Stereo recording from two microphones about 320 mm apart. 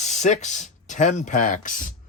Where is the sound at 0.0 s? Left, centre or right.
Left.